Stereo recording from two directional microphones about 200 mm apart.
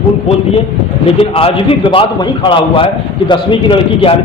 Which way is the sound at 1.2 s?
25° left (ahead or behind).